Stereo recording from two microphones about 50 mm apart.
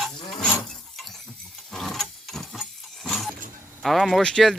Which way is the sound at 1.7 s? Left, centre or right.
Centre.